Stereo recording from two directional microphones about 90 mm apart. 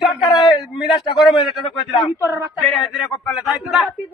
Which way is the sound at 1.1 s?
75° left (ahead or behind).